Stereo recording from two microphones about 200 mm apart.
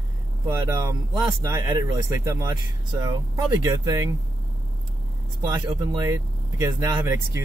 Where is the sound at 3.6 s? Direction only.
15° right (ahead or behind).